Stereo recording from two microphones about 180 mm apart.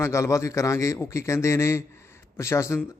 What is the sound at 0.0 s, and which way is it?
A man's voice, 15° left (ahead or behind).